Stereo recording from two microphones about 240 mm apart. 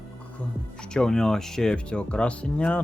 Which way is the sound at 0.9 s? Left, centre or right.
Centre.